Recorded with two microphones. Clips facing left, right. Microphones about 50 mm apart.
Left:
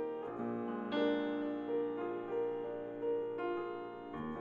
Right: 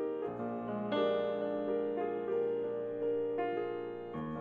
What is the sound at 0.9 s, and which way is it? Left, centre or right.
Music, right.